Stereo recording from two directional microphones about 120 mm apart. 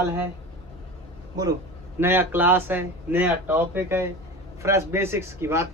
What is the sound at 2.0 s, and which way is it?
A man's voice, 20° right (ahead or behind).